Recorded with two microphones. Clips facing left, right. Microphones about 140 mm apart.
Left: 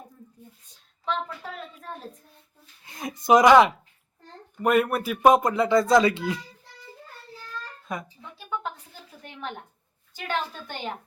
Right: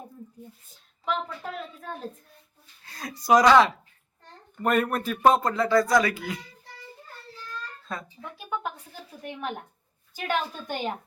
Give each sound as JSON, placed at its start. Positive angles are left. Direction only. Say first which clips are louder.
{"t": 1.0, "sound": "a woman's voice", "louder": "even", "side_deg": -5}
{"t": 2.8, "sound": "speech", "louder": "left 4 dB", "side_deg": 20}
{"t": 4.5, "sound": "speech", "louder": "left 2 dB", "side_deg": 5}
{"t": 7.9, "sound": "speech", "louder": "left 3 dB", "side_deg": 15}
{"t": 9.2, "sound": "a woman's voice", "louder": "right 3 dB", "side_deg": -10}